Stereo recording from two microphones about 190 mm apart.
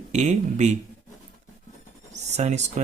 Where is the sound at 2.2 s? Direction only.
35° right (ahead or behind).